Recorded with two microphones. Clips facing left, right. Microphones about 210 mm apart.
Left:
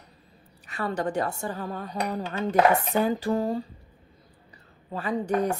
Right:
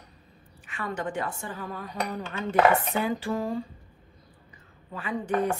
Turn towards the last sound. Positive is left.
turn(degrees=40)  # may be behind; listen again after turning